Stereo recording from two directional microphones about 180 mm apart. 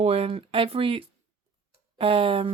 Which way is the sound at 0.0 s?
35° right (ahead or behind).